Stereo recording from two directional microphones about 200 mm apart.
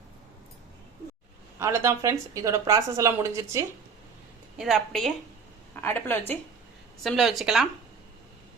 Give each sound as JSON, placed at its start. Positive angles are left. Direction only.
{"t": 1.5, "sound": "a woman's voice", "side_deg": -15}
{"t": 4.5, "sound": "a woman's voice", "side_deg": 0}
{"t": 7.0, "sound": "a woman's voice", "side_deg": 0}